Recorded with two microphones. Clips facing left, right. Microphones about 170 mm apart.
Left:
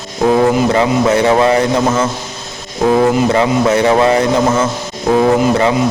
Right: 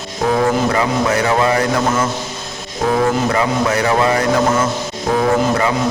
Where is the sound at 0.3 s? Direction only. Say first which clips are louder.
Left 4 dB; 25° left (ahead or behind).